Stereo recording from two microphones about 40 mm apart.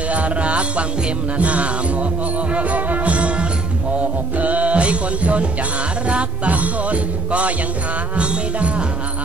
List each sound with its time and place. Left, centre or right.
0.1 s music: right